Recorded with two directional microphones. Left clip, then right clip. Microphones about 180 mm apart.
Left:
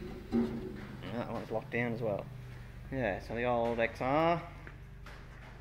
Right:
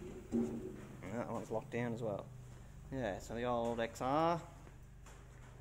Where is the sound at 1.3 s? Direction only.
5° right (ahead or behind).